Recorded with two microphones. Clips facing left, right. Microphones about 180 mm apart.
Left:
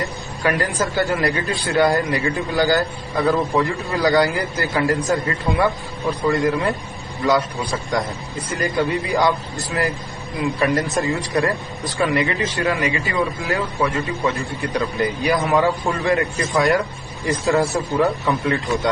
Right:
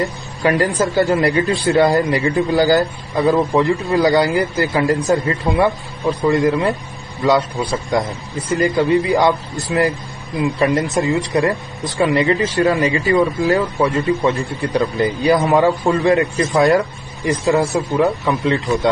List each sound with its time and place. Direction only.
0.0 s a man's voice: 20° right (ahead or behind)
8.5 s a man's voice: 25° right (ahead or behind)